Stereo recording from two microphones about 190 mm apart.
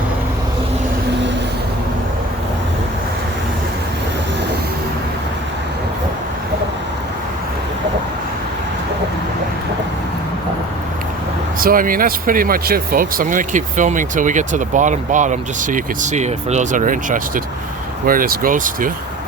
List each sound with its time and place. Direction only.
11.6 s speech: 50° right (ahead or behind)